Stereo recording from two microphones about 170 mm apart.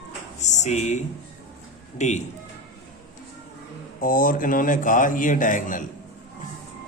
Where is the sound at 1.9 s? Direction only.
45° left (ahead or behind).